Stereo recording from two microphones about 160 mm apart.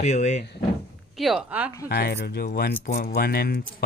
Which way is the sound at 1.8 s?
75° left (ahead or behind).